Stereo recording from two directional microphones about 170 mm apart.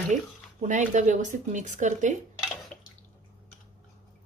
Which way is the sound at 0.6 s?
45° right (ahead or behind).